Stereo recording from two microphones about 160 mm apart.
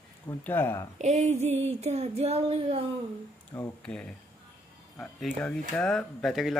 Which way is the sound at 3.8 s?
5° left (ahead or behind).